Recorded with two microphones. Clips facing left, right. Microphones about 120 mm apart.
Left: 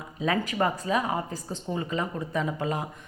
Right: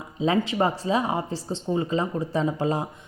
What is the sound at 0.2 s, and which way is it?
Speech, 25° right (ahead or behind).